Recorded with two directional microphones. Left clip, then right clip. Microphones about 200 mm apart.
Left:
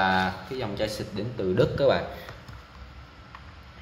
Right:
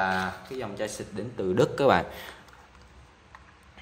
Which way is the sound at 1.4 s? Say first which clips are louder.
Even; 35° right (ahead or behind).